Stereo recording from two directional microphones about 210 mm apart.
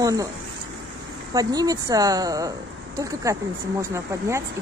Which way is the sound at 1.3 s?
15° right (ahead or behind).